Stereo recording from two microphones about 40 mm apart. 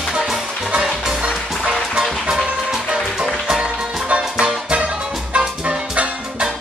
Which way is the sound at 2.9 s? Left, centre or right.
Centre.